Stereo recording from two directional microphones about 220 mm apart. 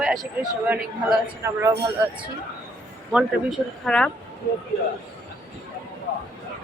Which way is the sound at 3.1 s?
Centre (ahead or behind).